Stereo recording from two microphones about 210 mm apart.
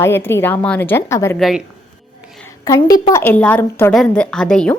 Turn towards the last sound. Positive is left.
turn(degrees=5)  # may be behind; listen again after turning